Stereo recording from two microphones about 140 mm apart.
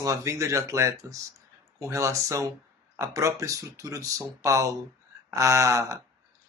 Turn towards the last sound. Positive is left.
turn(degrees=-20)  # may be behind; listen again after turning